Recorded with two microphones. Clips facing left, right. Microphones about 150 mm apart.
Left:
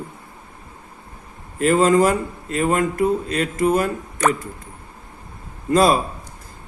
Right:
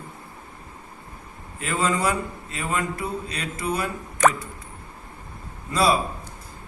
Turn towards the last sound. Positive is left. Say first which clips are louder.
# left 5 dB
turn(degrees=50)  # may be behind; listen again after turning